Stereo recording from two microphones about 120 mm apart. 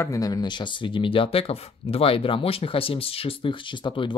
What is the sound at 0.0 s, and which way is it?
Speech, 30° left (ahead or behind).